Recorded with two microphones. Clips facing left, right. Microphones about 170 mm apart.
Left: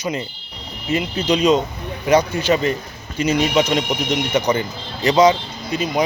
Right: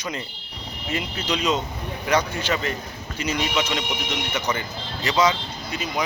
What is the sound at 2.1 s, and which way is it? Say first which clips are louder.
Speech: left 7 dB; 10° left (ahead or behind).